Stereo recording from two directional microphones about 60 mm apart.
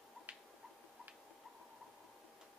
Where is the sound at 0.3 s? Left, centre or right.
Right.